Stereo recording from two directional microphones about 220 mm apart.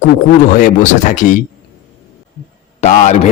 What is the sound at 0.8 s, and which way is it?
Speech, 35° left (ahead or behind).